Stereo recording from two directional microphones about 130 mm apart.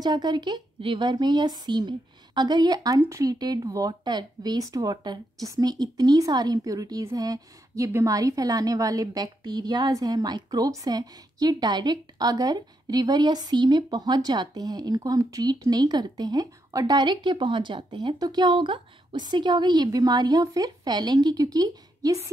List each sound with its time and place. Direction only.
0.0 s a woman's voice: 35° right (ahead or behind)